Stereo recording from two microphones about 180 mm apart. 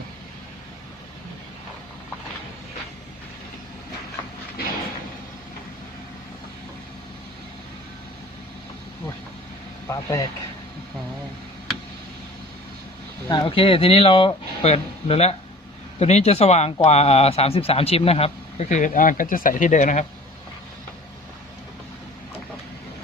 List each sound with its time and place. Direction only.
9.8 s speech: 20° left (ahead or behind)
13.2 s speech: 25° left (ahead or behind); by 20.1 s 45° left (ahead or behind)